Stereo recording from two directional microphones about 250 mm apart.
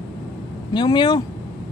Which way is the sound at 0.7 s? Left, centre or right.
Centre.